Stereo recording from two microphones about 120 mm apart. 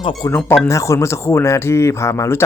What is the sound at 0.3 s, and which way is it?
Speech, 20° left (ahead or behind).